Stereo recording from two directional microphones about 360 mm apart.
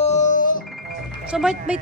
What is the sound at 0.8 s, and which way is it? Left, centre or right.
Music, centre.